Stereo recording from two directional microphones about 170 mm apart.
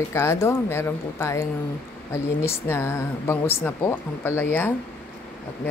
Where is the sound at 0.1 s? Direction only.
15° left (ahead or behind).